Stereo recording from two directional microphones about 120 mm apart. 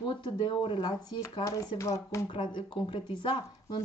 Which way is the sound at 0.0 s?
40° left (ahead or behind).